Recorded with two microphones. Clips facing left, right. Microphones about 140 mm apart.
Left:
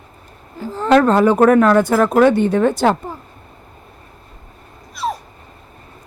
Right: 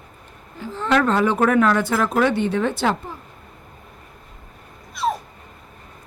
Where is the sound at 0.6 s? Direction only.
40° left (ahead or behind).